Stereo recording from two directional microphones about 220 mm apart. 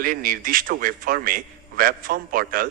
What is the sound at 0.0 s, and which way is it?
A man's voice, 40° right (ahead or behind).